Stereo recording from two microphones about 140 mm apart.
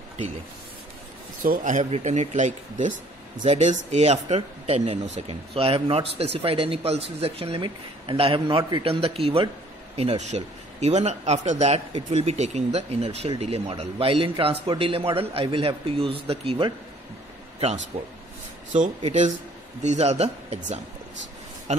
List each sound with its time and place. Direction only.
1.4 s a man's voice: 75° right (ahead or behind); by 16.7 s 40° right (ahead or behind)
17.9 s speech: 45° right (ahead or behind)
19.8 s speech: 55° right (ahead or behind)
21.7 s a sound: 55° right (ahead or behind)